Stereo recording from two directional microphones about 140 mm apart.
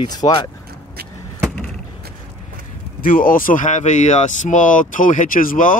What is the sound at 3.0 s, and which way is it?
Speech, 90° left.